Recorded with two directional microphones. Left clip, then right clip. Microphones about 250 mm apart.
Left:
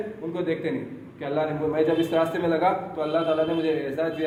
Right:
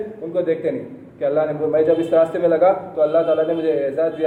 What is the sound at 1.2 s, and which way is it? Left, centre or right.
A man's voice, left.